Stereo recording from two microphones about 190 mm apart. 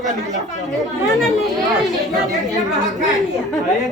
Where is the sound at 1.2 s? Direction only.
Centre (ahead or behind).